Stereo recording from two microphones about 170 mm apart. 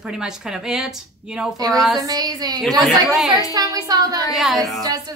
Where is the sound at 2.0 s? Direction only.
20° right (ahead or behind).